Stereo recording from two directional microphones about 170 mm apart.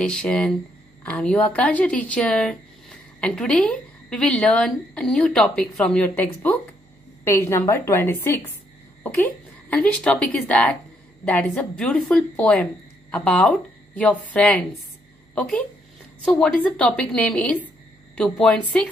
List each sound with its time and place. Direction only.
0.0 s a woman's voice: 5° left (ahead or behind)